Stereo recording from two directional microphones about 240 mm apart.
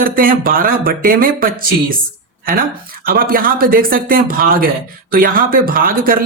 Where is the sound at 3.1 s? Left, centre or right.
Right.